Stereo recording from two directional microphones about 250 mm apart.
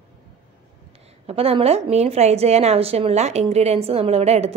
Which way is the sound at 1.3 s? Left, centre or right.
Right.